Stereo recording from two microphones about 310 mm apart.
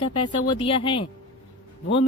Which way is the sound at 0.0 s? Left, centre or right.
Centre.